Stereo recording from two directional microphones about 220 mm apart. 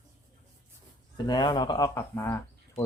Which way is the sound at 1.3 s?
20° left (ahead or behind).